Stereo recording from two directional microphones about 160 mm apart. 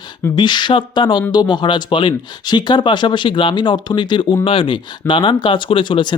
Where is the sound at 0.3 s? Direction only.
30° left (ahead or behind).